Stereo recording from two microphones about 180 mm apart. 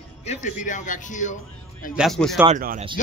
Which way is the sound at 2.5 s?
45° right (ahead or behind).